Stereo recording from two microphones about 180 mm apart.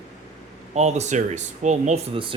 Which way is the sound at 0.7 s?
40° right (ahead or behind).